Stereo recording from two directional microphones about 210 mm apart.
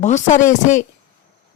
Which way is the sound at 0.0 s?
35° left (ahead or behind).